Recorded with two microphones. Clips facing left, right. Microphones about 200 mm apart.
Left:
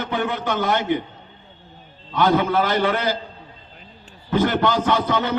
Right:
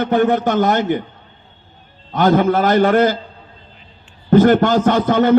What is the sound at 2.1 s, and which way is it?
A man's voice, 45° right (ahead or behind).